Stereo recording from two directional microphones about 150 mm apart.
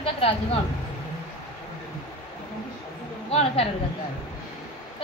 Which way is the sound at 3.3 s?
40° left (ahead or behind).